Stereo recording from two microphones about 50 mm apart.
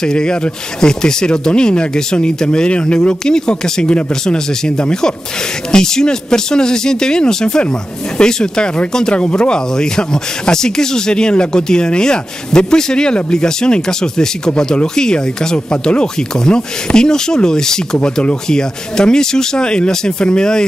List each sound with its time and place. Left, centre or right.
0.0 s speech: centre